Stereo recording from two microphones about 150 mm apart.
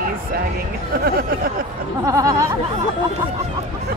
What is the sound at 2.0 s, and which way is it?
Speech, 20° right (ahead or behind).